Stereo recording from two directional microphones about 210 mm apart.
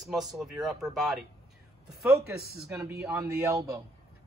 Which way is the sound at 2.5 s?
5° right (ahead or behind).